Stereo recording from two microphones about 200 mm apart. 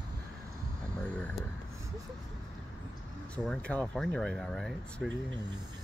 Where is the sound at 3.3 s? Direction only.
5° left (ahead or behind).